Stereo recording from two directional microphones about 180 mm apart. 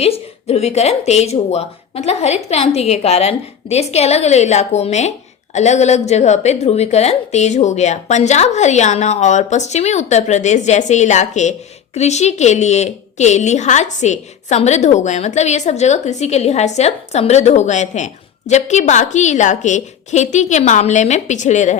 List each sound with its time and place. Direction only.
0.0 s a woman's voice: 35° left (ahead or behind)